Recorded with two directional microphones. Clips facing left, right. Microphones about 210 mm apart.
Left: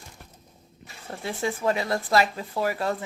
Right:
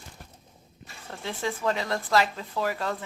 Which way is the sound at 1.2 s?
10° left (ahead or behind).